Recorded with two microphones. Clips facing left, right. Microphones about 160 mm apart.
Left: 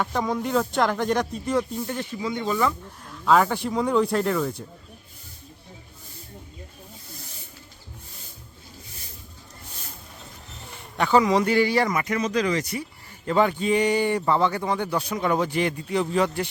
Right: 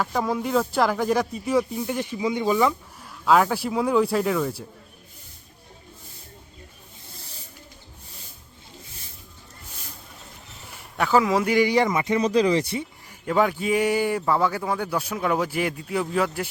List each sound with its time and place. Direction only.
0.0 s speech: 5° right (ahead or behind)
3.0 s speech: 5° right (ahead or behind)
10.9 s a man's voice: 5° right (ahead or behind); by 12.8 s 30° right (ahead or behind)
13.2 s speech: 5° right (ahead or behind)